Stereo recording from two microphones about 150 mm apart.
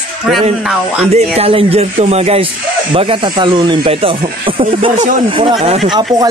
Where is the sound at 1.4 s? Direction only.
40° right (ahead or behind).